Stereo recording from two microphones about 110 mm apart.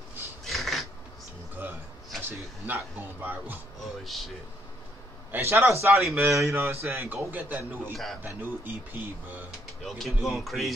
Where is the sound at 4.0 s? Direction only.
Centre (ahead or behind).